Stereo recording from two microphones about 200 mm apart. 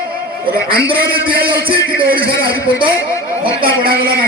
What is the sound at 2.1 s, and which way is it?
A man's voice, 50° right (ahead or behind).